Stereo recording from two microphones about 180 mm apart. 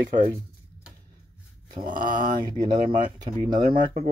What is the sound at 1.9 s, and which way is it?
Speech, 50° right (ahead or behind).